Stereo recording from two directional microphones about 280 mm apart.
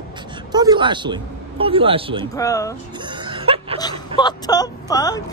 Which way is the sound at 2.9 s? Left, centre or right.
Centre.